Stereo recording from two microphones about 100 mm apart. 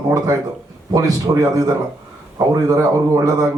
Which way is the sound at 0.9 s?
35° right (ahead or behind).